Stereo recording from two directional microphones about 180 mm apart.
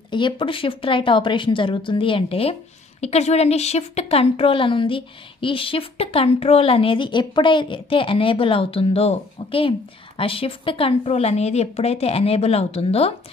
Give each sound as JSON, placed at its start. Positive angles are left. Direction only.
{"t": 0.1, "sound": "a woman's voice", "side_deg": 25}